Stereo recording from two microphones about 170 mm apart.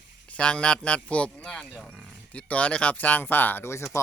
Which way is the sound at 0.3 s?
5° left (ahead or behind).